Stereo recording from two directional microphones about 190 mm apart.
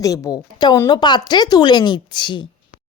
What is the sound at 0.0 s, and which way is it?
A woman's voice, 20° left (ahead or behind).